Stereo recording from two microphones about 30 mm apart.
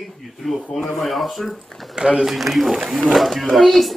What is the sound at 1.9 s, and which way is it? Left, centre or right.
Speech, right.